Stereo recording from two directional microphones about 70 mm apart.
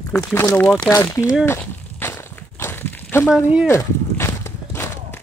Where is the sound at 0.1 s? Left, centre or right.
Left.